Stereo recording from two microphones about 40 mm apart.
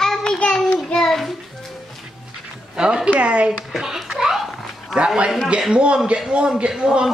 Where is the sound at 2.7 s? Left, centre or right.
Right.